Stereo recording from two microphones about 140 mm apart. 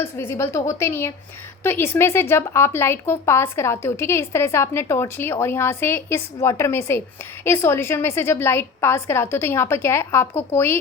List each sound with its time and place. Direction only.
0.0 s a woman's voice: 15° left (ahead or behind)